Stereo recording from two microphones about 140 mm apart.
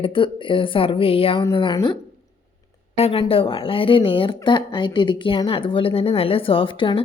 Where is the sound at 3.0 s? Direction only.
45° left (ahead or behind).